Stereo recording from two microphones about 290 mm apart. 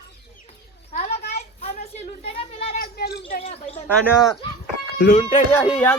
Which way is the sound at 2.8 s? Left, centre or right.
Left.